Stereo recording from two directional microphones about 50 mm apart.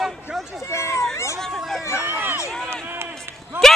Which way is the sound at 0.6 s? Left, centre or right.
Left.